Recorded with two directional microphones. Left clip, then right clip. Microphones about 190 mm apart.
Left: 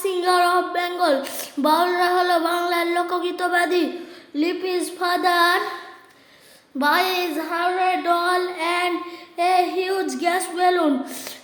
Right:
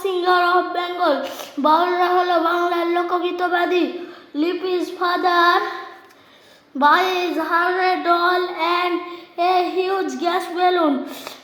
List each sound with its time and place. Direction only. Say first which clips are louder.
0.0 s child singing: right 1 dB; 25° left (ahead or behind)
6.7 s a woman's voice: right 4 dB; 20° left (ahead or behind)
8.0 s child singing: right 3 dB; 20° left (ahead or behind)